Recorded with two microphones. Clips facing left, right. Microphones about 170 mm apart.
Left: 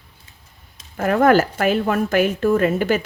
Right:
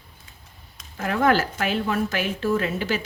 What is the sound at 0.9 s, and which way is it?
A woman's voice, 50° left (ahead or behind).